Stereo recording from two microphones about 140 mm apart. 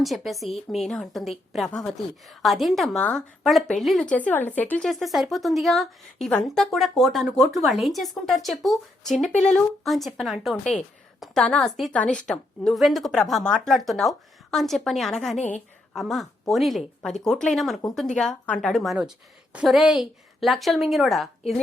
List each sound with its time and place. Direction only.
0.0 s speech: centre (ahead or behind)
4.9 s speech: centre (ahead or behind)
15.4 s a woman's voice: 55° left (ahead or behind)
16.0 s speech: centre (ahead or behind)